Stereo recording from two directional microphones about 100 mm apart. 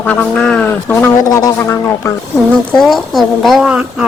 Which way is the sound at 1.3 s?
40° left (ahead or behind).